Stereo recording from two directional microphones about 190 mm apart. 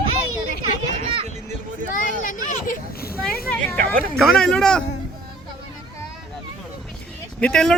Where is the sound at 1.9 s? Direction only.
45° left (ahead or behind).